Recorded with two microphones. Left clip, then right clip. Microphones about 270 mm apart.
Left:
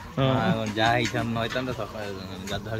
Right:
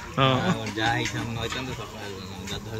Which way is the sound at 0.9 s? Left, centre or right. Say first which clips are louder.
Left 1 dB; left.